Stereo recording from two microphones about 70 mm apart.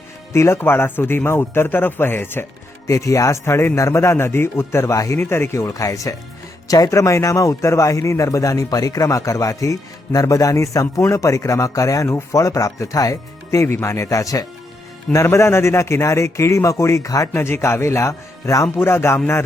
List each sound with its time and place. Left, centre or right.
0.3 s a man's voice: left
2.8 s a man's voice: left
5.2 s a man's voice: left
5.6 s a man's voice: left
13.7 s a man's voice: left